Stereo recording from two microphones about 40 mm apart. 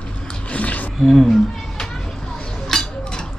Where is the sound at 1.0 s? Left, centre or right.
Centre.